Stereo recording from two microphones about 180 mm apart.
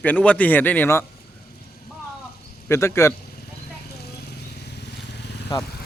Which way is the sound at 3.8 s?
65° left (ahead or behind).